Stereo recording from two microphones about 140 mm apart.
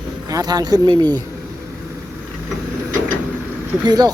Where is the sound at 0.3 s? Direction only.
30° right (ahead or behind).